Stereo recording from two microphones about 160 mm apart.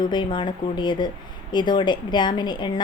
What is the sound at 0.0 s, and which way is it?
A woman's voice, 30° left (ahead or behind).